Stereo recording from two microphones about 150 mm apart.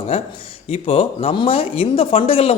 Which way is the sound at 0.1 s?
40° left (ahead or behind).